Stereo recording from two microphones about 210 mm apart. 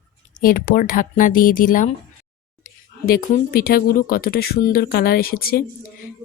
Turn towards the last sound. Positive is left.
turn(degrees=45)  # may be behind; listen again after turning